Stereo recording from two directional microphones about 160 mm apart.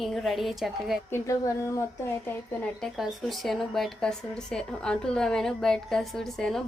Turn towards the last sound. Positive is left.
turn(degrees=5)  # may be behind; listen again after turning